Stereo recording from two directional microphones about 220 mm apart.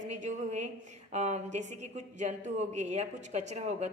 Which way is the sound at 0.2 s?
30° right (ahead or behind).